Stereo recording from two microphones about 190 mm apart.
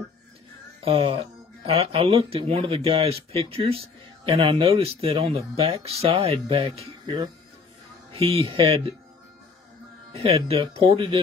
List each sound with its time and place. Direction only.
0.8 s speech: 30° right (ahead or behind)
10.1 s speech: 30° right (ahead or behind)